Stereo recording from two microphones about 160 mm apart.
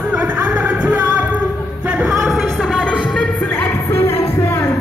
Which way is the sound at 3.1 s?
5° left (ahead or behind).